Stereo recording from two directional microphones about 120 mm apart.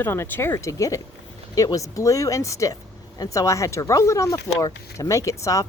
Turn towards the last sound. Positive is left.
turn(degrees=25)  # may be behind; listen again after turning